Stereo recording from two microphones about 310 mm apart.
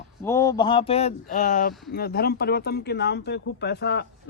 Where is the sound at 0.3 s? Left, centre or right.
Centre.